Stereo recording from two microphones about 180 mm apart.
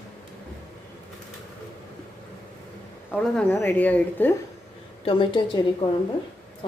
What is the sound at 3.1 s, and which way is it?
Speech, 5° right (ahead or behind).